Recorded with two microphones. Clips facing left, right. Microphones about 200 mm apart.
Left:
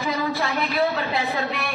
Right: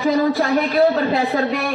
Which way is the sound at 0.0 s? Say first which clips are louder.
Right 8 dB; 35° right (ahead or behind).